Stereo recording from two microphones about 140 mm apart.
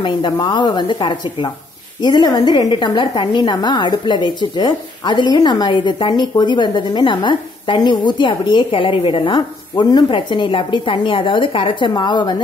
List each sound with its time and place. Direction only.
0.0 s a woman's voice: 35° left (ahead or behind)